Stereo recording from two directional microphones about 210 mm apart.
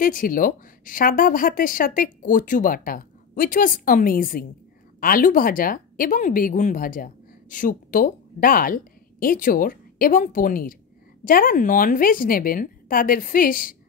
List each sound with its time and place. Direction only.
0.0 s a woman's voice: 40° left (ahead or behind)